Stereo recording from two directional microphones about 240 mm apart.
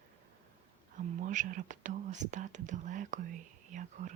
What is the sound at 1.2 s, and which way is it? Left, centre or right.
Speech, right.